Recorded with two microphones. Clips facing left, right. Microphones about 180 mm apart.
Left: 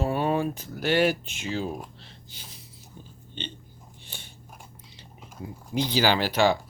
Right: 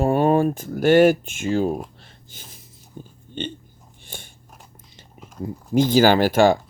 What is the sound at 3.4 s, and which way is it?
Speech, 50° right (ahead or behind).